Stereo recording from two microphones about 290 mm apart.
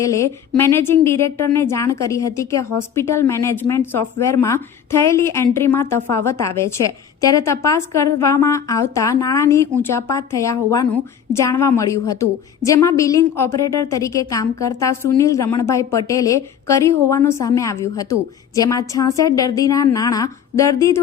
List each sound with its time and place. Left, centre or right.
0.0 s a woman's voice: centre